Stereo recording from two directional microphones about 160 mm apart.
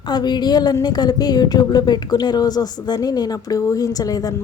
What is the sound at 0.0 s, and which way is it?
A woman's voice, 25° left (ahead or behind).